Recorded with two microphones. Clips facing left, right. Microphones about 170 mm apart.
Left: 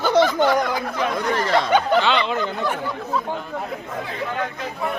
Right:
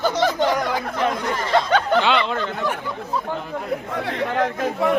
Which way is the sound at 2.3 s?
10° left (ahead or behind).